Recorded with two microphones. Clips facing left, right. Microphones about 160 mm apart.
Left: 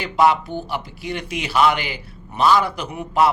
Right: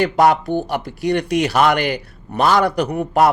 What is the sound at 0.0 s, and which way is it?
Speech, 45° right (ahead or behind).